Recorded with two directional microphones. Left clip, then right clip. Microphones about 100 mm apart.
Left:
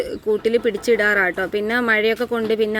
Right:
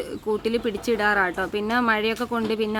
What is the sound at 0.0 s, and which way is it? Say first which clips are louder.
Speech: left 6 dB; 20° left (ahead or behind).